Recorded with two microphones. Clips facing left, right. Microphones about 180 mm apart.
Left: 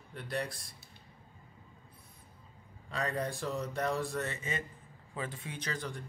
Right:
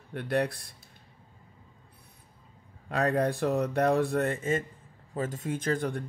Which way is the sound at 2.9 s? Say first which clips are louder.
Right 9 dB; 65° right (ahead or behind).